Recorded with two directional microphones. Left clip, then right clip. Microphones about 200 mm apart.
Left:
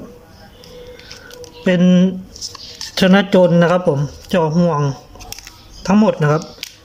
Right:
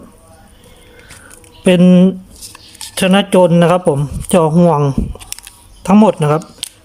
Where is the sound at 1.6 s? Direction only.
15° right (ahead or behind).